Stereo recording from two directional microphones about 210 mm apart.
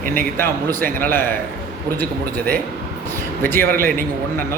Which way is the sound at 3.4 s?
10° left (ahead or behind).